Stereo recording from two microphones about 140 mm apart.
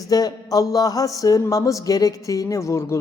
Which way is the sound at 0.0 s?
25° left (ahead or behind).